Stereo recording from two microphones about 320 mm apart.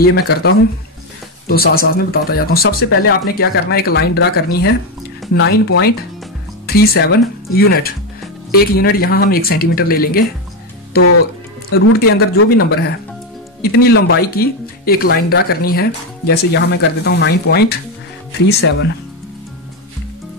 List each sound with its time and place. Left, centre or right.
0.0 s speech: left
12.2 s speech: left